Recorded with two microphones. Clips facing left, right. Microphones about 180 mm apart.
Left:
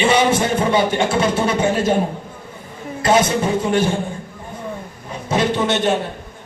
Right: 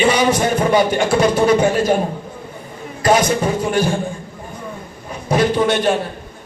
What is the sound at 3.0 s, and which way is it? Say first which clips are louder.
Speech: right 1 dB; 25° left (ahead or behind).